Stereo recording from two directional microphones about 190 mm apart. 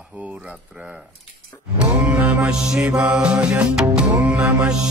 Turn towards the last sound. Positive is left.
turn(degrees=-5)  # may be behind; listen again after turning